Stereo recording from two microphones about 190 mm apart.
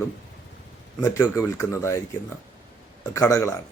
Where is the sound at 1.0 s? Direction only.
15° left (ahead or behind).